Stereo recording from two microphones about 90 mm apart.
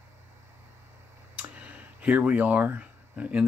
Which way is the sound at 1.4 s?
15° right (ahead or behind).